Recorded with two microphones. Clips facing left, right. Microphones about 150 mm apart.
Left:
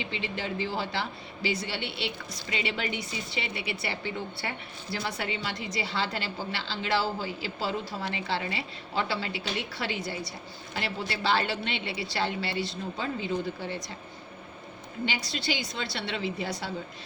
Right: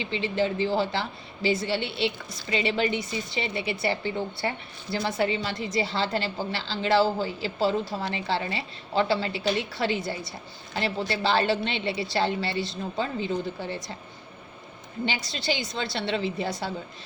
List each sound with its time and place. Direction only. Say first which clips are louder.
0.0 s a woman's voice: right 8 dB; 30° right (ahead or behind)
5.7 s a woman's voice: right 6 dB; 30° right (ahead or behind)
15.0 s speech: right 3 dB; 30° right (ahead or behind)